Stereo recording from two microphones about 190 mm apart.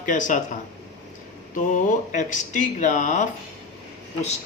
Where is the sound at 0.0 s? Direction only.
40° left (ahead or behind).